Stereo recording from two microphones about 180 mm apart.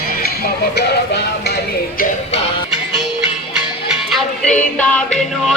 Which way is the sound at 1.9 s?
40° left (ahead or behind).